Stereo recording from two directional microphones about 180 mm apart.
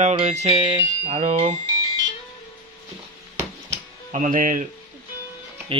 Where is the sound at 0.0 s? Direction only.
35° right (ahead or behind).